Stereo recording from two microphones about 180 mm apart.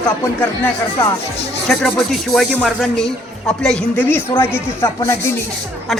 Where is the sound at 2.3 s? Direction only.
Centre (ahead or behind).